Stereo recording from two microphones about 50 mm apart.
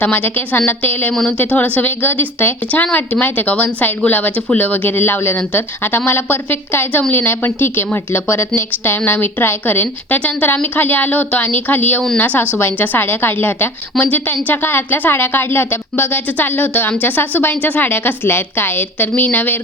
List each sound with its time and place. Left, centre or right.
0.0 s a woman's voice: left
2.8 s a woman's voice: left